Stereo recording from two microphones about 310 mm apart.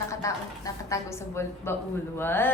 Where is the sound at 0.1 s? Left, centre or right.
Centre.